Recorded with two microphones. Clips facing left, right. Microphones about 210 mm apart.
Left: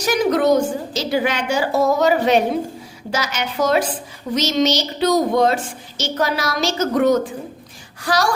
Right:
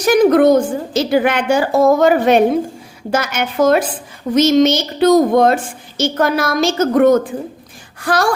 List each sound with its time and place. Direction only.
0.0 s a woman's voice: 55° right (ahead or behind)